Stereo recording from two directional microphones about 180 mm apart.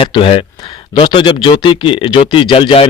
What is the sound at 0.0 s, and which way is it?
Speech, 30° left (ahead or behind).